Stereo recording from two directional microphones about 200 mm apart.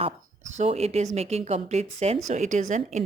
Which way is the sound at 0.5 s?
35° right (ahead or behind).